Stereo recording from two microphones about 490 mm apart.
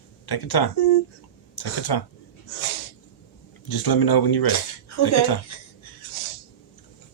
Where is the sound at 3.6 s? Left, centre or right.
Left.